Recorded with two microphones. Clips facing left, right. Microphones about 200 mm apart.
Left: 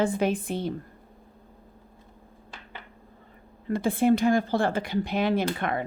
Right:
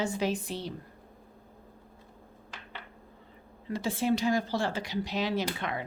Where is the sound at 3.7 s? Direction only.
55° left (ahead or behind).